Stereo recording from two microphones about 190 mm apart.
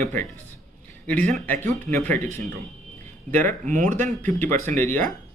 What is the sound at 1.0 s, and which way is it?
Speech, 5° left (ahead or behind).